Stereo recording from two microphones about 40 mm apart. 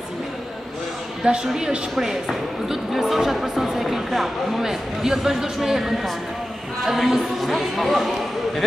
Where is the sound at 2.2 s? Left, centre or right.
Centre.